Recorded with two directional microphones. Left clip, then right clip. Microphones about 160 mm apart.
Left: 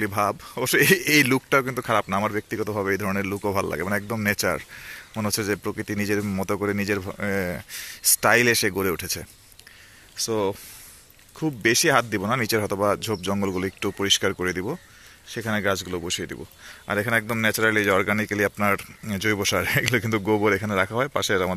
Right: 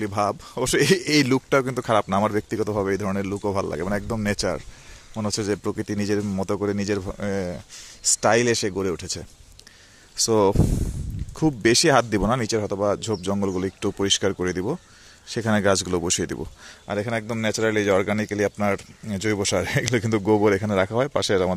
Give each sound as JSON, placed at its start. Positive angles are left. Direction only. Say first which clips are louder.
{"t": 0.0, "sound": "speech", "louder": "even", "side_deg": -15}
{"t": 10.1, "sound": "speech", "louder": "right 6 dB", "side_deg": -35}
{"t": 12.3, "sound": "speech", "louder": "even", "side_deg": -15}
{"t": 15.2, "sound": "speech", "louder": "right 4 dB", "side_deg": -35}
{"t": 16.8, "sound": "speech", "louder": "left 3 dB", "side_deg": -10}